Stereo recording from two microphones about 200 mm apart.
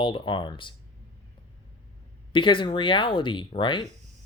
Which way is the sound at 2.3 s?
25° left (ahead or behind).